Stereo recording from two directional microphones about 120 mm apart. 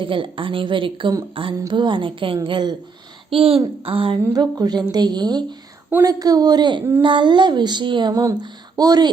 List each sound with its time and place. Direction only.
0.0 s a woman's voice: 45° right (ahead or behind)
3.2 s a woman's voice: 50° right (ahead or behind)
4.3 s speech: 35° right (ahead or behind)